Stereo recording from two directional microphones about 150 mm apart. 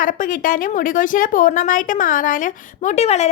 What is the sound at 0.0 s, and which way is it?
A woman's voice, 65° left (ahead or behind).